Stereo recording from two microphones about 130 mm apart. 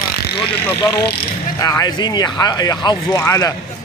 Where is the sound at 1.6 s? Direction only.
30° left (ahead or behind).